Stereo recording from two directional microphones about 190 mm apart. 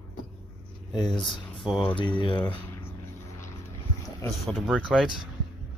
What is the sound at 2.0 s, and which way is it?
Speech, 25° left (ahead or behind).